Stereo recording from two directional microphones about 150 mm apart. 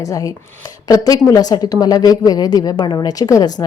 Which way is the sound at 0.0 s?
20° left (ahead or behind).